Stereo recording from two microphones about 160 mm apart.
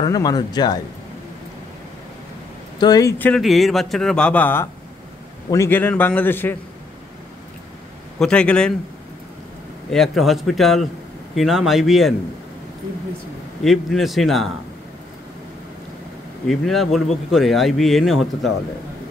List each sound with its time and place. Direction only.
0.0 s speech: 25° left (ahead or behind)
2.8 s speech: 25° left (ahead or behind)
3.3 s a man's voice: centre (ahead or behind)
8.2 s speech: 5° left (ahead or behind)
9.8 s speech: centre (ahead or behind)
13.7 s speech: centre (ahead or behind)
16.4 s speech: centre (ahead or behind)